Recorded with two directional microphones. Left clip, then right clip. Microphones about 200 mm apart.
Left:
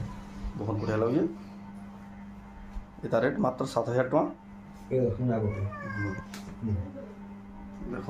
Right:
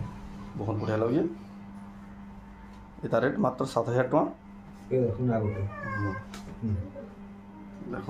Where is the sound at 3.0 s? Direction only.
10° right (ahead or behind).